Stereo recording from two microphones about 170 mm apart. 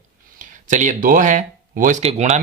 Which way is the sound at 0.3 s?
50° right (ahead or behind).